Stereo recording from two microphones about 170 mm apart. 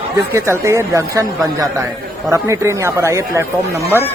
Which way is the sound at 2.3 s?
15° right (ahead or behind).